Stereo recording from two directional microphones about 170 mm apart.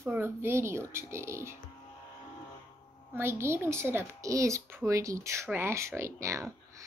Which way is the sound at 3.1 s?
15° right (ahead or behind).